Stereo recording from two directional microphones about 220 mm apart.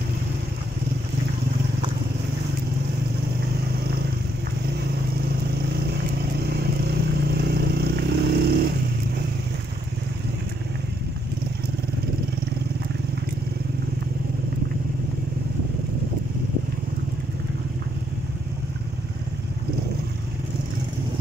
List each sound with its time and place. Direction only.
6.4 s vehicle: 45° right (ahead or behind)